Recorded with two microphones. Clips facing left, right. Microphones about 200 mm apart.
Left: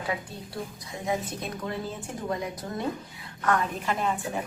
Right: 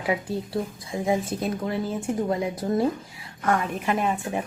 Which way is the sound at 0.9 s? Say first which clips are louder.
Right 4 dB; 30° right (ahead or behind).